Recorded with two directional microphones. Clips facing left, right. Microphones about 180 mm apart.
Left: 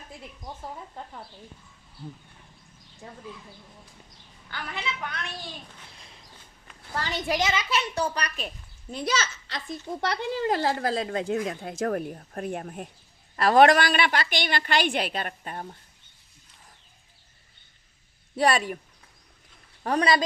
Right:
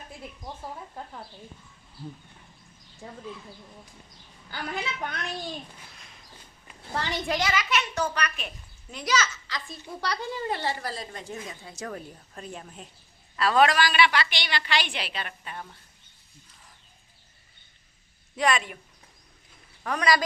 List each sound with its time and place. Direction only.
4.5 s a woman's voice: 35° right (ahead or behind)
6.8 s a child's voice: 20° right (ahead or behind)
7.3 s a child's voice: 20° left (ahead or behind)
10.0 s a woman's voice: 65° left (ahead or behind); by 15.6 s 45° left (ahead or behind)
18.3 s a child's voice: 35° left (ahead or behind)
19.8 s a child's voice: 30° left (ahead or behind)